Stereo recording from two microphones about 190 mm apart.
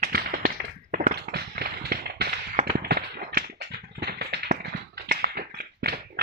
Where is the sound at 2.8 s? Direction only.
55° right (ahead or behind).